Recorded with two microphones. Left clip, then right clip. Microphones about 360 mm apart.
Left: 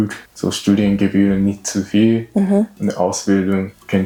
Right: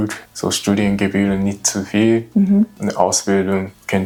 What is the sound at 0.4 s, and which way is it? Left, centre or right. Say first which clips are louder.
Speech: left 1 dB; right.